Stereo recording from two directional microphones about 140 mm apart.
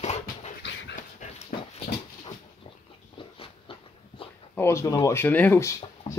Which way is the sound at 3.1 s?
40° left (ahead or behind).